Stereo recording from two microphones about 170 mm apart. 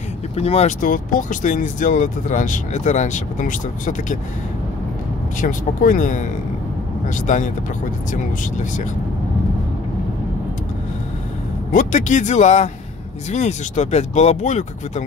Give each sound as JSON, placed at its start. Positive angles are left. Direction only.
{"t": 0.4, "sound": "speech", "side_deg": 40}
{"t": 5.4, "sound": "speech", "side_deg": 50}
{"t": 11.7, "sound": "speech", "side_deg": 45}